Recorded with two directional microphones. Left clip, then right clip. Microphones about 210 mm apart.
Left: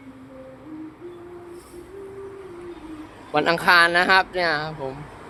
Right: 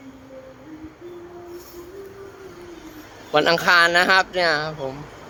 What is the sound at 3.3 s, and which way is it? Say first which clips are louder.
Speech: right 1 dB; 10° right (ahead or behind).